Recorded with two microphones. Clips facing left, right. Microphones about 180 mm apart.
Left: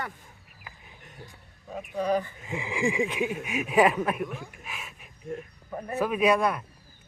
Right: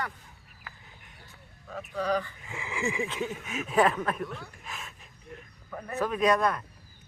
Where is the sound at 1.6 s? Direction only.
15° left (ahead or behind).